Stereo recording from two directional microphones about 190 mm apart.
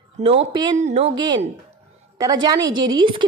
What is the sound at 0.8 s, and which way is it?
A woman's voice, 35° right (ahead or behind).